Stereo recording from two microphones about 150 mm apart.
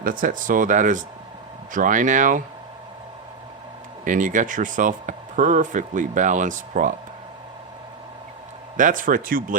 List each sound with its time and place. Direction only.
0.0 s speech: 70° right (ahead or behind)
4.0 s speech: 60° right (ahead or behind)
8.7 s speech: 60° right (ahead or behind)